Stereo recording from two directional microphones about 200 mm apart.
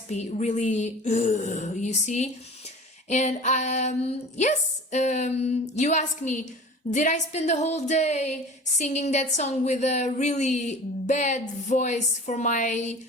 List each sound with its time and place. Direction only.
0.1 s a woman's voice: 35° left (ahead or behind)